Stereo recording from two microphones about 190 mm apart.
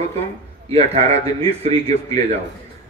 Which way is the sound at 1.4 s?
30° right (ahead or behind).